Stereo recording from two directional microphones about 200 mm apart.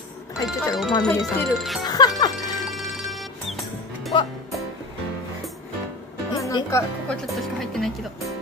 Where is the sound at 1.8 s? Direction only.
20° left (ahead or behind).